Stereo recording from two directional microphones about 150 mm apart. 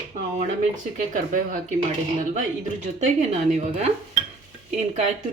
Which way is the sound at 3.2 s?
50° right (ahead or behind).